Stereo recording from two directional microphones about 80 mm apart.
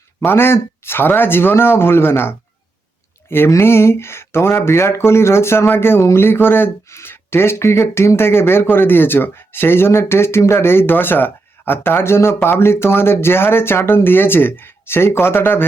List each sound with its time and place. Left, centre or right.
0.3 s speech: left